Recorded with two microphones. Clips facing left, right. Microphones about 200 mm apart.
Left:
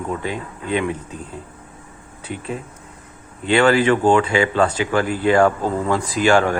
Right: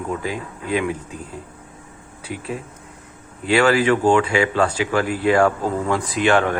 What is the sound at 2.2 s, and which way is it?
Speech, 5° right (ahead or behind).